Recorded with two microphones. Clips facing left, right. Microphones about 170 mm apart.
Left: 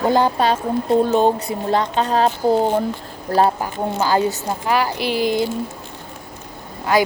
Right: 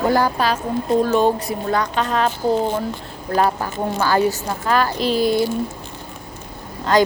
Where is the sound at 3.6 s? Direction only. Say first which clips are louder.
Even; 20° left (ahead or behind).